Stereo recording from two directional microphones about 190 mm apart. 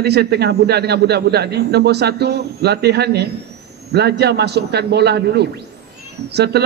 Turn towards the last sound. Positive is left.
turn(degrees=-60)  # may be behind; listen again after turning